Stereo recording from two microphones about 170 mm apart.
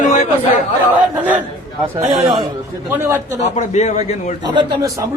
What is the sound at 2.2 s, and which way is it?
Speech, 30° right (ahead or behind).